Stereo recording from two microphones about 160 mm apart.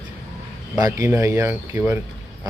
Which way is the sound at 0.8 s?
20° right (ahead or behind).